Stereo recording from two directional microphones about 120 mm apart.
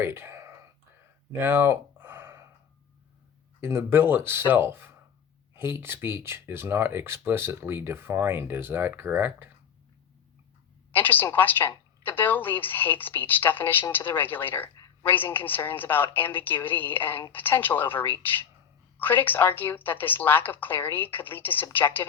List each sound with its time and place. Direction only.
0.0 s whispering: 20° right (ahead or behind)
1.3 s a sound: 20° right (ahead or behind)
3.6 s speech: 20° right (ahead or behind)
10.9 s speech: 15° left (ahead or behind)